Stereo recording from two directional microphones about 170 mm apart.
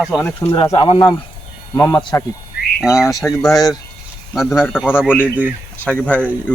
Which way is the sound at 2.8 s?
5° right (ahead or behind).